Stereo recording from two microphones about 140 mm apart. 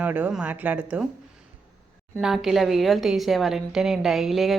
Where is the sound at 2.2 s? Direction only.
5° right (ahead or behind).